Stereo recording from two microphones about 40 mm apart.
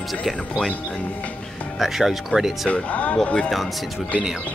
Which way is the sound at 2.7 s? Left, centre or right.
Left.